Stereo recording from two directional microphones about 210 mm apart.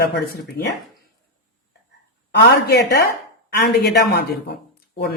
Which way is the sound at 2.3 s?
50° left (ahead or behind).